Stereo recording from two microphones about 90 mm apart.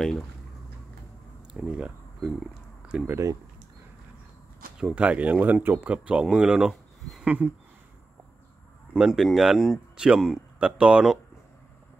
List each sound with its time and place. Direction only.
1.5 s speech: 10° right (ahead or behind)
3.1 s speech: 35° right (ahead or behind)
4.7 s speech: 10° right (ahead or behind)
8.9 s speech: 5° right (ahead or behind)